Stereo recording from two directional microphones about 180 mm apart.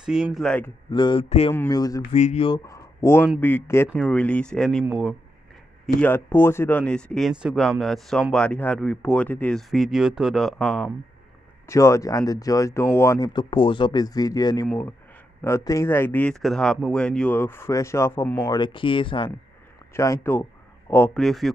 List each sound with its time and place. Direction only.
0.0 s speech: 5° right (ahead or behind)
0.8 s speech: 25° left (ahead or behind)
1.5 s speech: 15° left (ahead or behind)
2.1 s speech: 35° left (ahead or behind); by 5.1 s 5° right (ahead or behind)
5.9 s speech: 10° left (ahead or behind)
11.6 s speech: 15° left (ahead or behind)
19.9 s speech: 15° left (ahead or behind)
21.1 s speech: centre (ahead or behind)